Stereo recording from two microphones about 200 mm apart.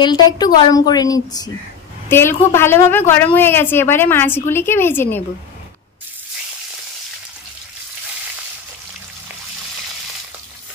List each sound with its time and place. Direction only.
0.0 s a woman's voice: 20° left (ahead or behind)